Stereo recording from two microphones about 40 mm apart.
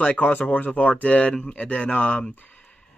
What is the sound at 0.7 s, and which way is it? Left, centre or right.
Speech, left.